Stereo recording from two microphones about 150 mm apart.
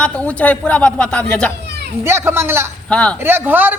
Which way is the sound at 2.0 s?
15° right (ahead or behind).